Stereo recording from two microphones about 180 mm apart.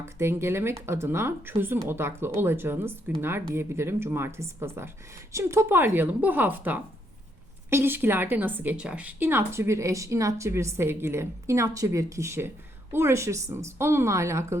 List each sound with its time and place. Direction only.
0.0 s a woman's voice: 15° right (ahead or behind)